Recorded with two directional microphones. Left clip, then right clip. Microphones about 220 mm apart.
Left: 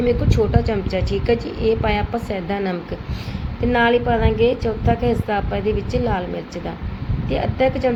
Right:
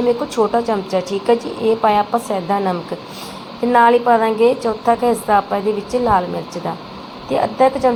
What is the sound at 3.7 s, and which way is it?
A woman's voice, 5° left (ahead or behind).